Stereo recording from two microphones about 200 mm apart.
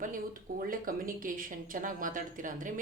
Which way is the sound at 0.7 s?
45° right (ahead or behind).